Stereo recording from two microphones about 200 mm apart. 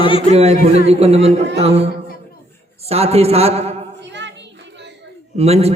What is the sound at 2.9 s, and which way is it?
Speech, 30° right (ahead or behind).